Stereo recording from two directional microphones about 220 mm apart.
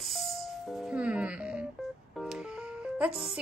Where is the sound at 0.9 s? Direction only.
5° right (ahead or behind).